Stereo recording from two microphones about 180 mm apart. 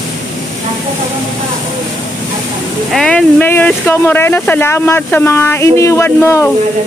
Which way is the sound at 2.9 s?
5° left (ahead or behind).